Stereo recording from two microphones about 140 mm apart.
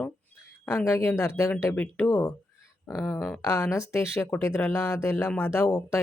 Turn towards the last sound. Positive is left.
turn(degrees=25)  # may be behind; listen again after turning